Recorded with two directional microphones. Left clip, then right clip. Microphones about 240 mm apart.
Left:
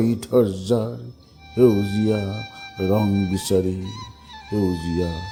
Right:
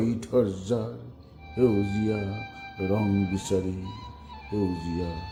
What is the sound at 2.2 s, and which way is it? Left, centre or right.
Speech, left.